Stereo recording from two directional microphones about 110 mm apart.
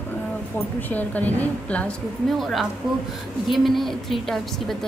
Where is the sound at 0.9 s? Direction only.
15° left (ahead or behind).